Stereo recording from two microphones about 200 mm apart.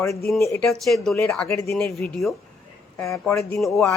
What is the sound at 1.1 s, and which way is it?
Speech, 15° left (ahead or behind).